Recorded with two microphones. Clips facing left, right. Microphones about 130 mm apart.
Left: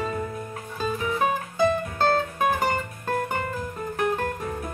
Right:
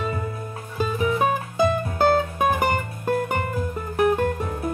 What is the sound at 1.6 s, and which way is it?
Music, 15° right (ahead or behind).